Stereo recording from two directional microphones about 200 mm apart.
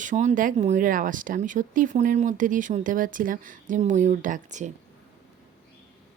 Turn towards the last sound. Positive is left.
turn(degrees=-35)  # may be behind; listen again after turning